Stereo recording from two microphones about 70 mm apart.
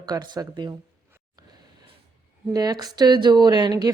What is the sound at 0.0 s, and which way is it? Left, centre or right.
Speech, right.